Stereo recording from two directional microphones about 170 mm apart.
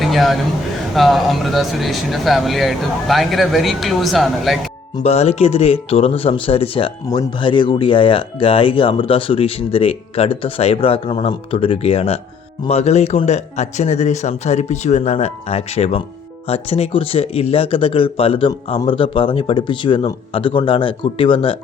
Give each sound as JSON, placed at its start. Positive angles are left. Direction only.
{"t": 0.0, "sound": "a sound", "side_deg": 0}
{"t": 0.9, "sound": "speech", "side_deg": 0}
{"t": 5.0, "sound": "speech", "side_deg": 40}